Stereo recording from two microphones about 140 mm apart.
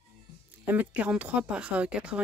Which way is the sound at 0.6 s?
10° right (ahead or behind).